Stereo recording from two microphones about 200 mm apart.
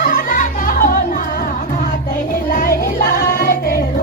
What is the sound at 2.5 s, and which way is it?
Music, 45° left (ahead or behind).